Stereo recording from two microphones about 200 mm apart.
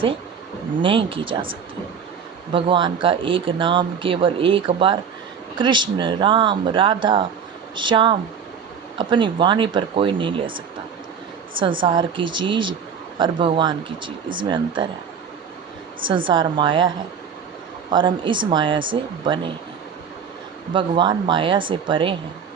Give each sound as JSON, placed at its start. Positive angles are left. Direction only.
{"t": 0.8, "sound": "speech", "side_deg": -25}
{"t": 11.8, "sound": "speech", "side_deg": -25}
{"t": 16.0, "sound": "speech", "side_deg": -25}
{"t": 17.9, "sound": "speech", "side_deg": -25}
{"t": 20.7, "sound": "speech", "side_deg": -25}